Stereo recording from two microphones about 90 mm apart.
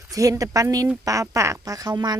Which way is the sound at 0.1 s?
40° right (ahead or behind).